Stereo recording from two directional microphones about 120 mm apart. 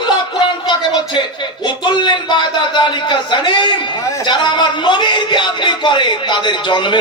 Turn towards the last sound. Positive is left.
turn(degrees=40)  # may be behind; listen again after turning